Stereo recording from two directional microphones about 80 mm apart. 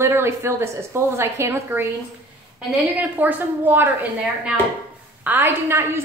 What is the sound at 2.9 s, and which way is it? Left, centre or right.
A woman's voice, right.